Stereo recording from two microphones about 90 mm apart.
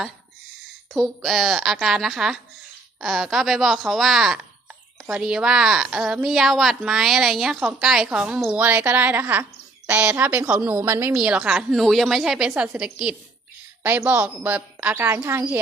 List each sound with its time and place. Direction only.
0.9 s a woman's voice: centre (ahead or behind); by 11.1 s 25° right (ahead or behind)
11.1 s a woman's voice: 10° right (ahead or behind)
13.8 s speech: 20° right (ahead or behind)
15.0 s speech: 25° right (ahead or behind)